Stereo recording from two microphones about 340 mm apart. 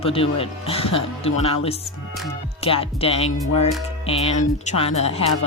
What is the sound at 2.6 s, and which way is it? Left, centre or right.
Speech, centre.